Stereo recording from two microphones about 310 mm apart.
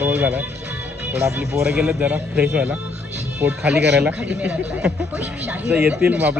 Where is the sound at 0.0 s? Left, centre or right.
Centre.